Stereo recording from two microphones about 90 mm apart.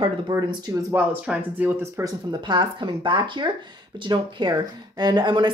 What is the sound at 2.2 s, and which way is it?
Speech, 55° right (ahead or behind).